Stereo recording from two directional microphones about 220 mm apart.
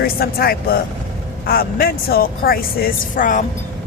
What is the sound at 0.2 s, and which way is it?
Speech, 45° left (ahead or behind).